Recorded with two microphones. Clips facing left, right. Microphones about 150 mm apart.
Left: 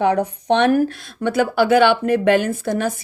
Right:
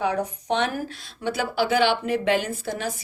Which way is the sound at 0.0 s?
65° left (ahead or behind).